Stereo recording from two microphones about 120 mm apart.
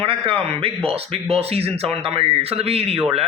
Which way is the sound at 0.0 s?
50° right (ahead or behind).